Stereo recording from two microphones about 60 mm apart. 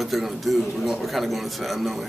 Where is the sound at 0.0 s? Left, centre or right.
Centre.